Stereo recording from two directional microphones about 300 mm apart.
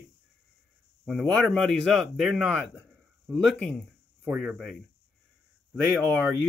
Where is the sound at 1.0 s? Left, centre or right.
Centre.